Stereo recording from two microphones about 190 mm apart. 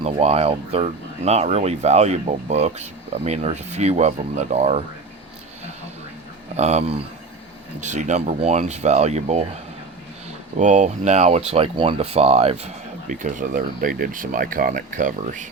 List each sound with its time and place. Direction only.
0.0 s speech: 35° right (ahead or behind)
6.6 s speech: 35° right (ahead or behind)
10.6 s speech: 40° right (ahead or behind)